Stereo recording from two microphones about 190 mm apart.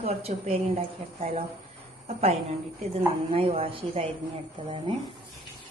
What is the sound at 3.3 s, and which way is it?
Speech, 30° right (ahead or behind).